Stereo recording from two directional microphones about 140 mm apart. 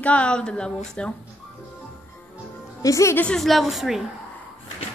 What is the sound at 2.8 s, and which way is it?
Speech, 20° left (ahead or behind).